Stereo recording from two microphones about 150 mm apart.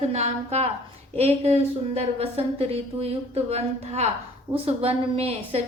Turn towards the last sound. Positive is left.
turn(degrees=-40)  # may be behind; listen again after turning